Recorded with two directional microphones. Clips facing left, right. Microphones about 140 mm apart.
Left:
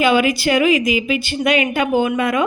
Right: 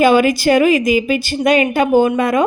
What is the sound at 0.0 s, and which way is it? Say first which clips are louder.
A woman's voice: right 4 dB; 45° right (ahead or behind).